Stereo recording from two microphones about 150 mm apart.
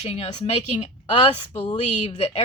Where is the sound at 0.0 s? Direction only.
40° left (ahead or behind).